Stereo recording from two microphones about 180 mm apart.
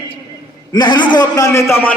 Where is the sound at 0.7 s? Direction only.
25° left (ahead or behind).